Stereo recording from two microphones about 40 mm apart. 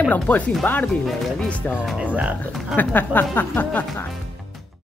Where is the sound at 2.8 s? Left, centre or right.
Left.